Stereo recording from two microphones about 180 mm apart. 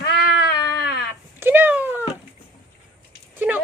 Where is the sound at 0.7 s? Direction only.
65° left (ahead or behind).